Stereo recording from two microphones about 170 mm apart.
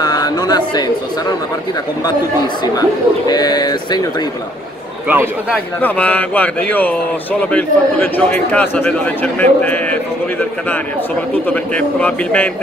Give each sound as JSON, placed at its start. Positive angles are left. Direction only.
{"t": 0.0, "sound": "a sound", "side_deg": 25}
{"t": 3.3, "sound": "speech", "side_deg": 25}
{"t": 5.0, "sound": "a man's voice", "side_deg": -10}
{"t": 5.8, "sound": "a man's voice", "side_deg": 10}
{"t": 11.4, "sound": "a man's voice", "side_deg": 10}